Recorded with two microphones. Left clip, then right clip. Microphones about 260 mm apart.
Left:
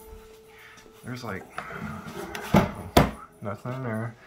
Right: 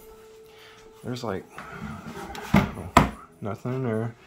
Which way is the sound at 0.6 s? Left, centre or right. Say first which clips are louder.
Right 5 dB; right.